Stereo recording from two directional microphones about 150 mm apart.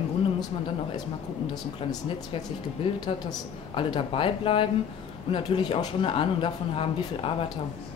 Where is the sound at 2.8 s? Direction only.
30° left (ahead or behind).